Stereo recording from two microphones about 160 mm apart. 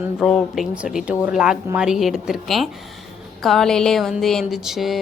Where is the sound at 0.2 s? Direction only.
Centre (ahead or behind).